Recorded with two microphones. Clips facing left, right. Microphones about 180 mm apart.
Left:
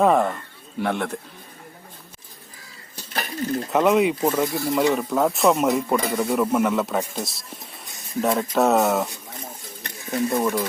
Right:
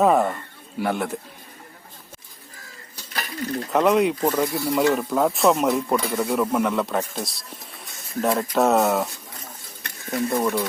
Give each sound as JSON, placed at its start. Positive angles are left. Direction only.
{"t": 0.0, "sound": "speech", "side_deg": -5}
{"t": 3.2, "sound": "a sound", "side_deg": 30}
{"t": 3.7, "sound": "speech", "side_deg": 0}
{"t": 10.2, "sound": "speech", "side_deg": 0}